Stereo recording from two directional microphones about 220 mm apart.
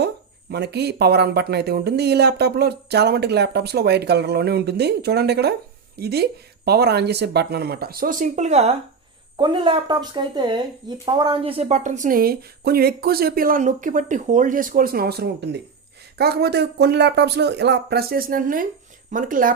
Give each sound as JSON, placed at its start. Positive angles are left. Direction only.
{"t": 0.5, "sound": "speech", "side_deg": -50}